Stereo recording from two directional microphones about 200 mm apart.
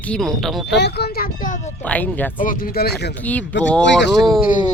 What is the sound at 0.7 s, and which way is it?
Speech, 55° left (ahead or behind).